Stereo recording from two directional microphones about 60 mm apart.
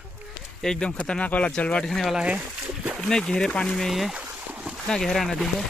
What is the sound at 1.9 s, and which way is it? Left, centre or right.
Speech, centre.